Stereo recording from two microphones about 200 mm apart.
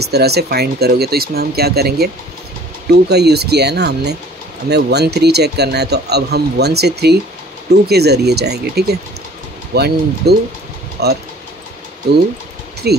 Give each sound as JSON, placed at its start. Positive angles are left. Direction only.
{"t": 0.0, "sound": "speech", "side_deg": -55}